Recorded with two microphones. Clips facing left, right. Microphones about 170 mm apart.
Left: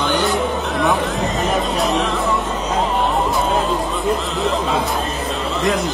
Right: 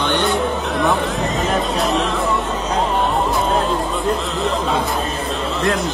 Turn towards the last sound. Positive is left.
turn(degrees=0)  # may be behind; listen again after turning